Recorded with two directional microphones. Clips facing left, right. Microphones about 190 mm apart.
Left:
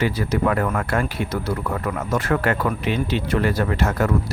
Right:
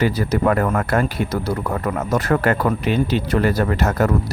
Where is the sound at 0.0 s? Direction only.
40° right (ahead or behind).